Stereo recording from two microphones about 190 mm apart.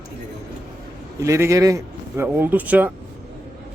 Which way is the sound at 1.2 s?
15° right (ahead or behind).